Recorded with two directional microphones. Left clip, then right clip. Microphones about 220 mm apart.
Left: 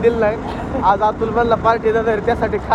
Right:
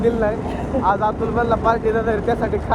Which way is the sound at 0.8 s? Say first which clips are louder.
Left 4 dB; 45° left (ahead or behind).